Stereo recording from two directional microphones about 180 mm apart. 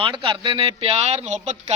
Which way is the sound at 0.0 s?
30° right (ahead or behind).